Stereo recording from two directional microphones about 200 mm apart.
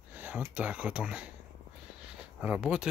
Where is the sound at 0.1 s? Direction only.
10° right (ahead or behind).